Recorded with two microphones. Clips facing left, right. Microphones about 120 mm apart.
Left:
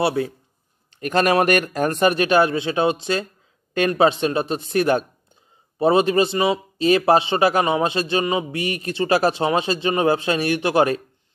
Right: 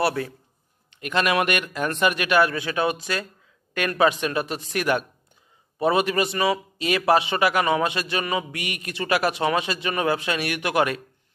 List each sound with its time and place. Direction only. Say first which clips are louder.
0.0 s a man's voice: left 3 dB; 25° left (ahead or behind)
0.8 s a man's voice: left 5 dB; 40° left (ahead or behind)